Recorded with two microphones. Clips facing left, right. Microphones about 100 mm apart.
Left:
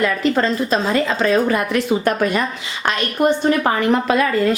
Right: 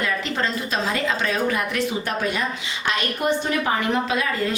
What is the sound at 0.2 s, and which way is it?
A woman's voice, 40° left (ahead or behind).